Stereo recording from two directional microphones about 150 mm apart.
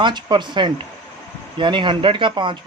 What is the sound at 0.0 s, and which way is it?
Speech, 30° right (ahead or behind).